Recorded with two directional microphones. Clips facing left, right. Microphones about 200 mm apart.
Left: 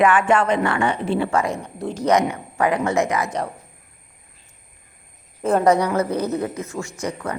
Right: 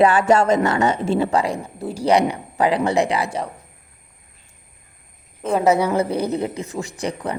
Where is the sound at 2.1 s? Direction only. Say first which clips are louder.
Right 2 dB; 35° right (ahead or behind).